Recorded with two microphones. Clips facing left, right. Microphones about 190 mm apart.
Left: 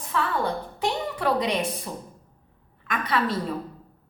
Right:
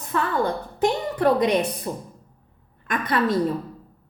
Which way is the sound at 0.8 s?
50° right (ahead or behind).